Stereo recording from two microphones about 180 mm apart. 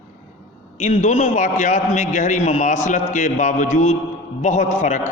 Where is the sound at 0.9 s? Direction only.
40° left (ahead or behind).